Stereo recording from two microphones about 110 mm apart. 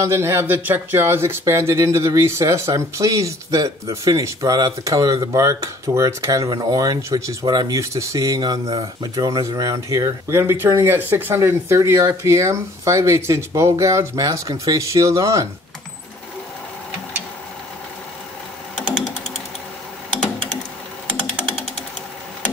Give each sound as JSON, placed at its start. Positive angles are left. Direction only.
{"t": 0.0, "sound": "speech", "side_deg": -25}
{"t": 7.4, "sound": "speech", "side_deg": -40}